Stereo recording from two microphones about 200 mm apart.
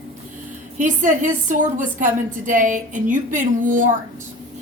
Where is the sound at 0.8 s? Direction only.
40° right (ahead or behind).